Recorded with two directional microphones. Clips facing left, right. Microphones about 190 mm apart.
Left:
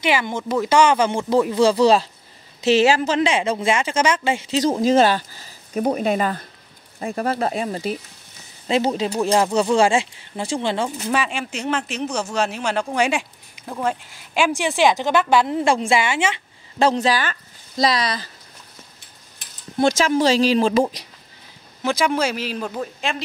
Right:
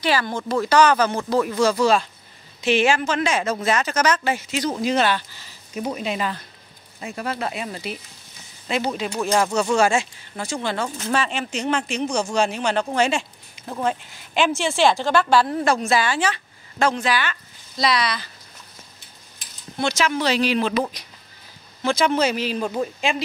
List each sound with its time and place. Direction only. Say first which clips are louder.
0.0 s a woman's voice: left 1 dB; 20° left (ahead or behind); by 6.4 s 50° left (ahead or behind)
7.0 s a woman's voice: left 5 dB; 35° left (ahead or behind)
11.1 s speech: left 1 dB; 10° left (ahead or behind)
13.7 s a woman's voice: even; centre (ahead or behind); by 18.3 s 40° left (ahead or behind)
19.8 s speech: left 5 dB; 40° left (ahead or behind)
21.8 s speech: right 1 dB; 10° left (ahead or behind)